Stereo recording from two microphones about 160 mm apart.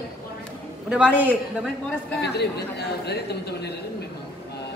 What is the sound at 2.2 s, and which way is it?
Speech, 90° left.